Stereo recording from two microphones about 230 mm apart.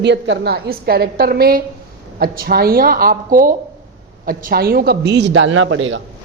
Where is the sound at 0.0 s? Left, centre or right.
Right.